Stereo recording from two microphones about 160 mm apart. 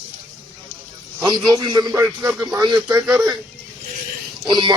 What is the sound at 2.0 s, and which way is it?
Speech, 10° right (ahead or behind).